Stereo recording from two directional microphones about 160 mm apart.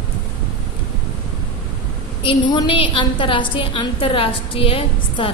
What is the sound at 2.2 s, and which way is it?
A woman's voice, 30° left (ahead or behind).